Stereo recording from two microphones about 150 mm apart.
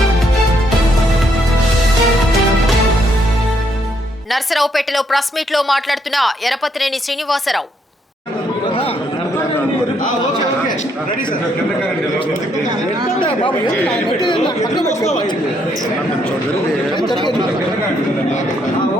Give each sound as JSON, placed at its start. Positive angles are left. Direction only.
{"t": 4.3, "sound": "a woman's voice", "side_deg": 0}
{"t": 14.1, "sound": "speech", "side_deg": 30}